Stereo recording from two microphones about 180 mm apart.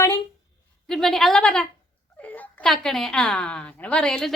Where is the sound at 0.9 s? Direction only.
Centre (ahead or behind).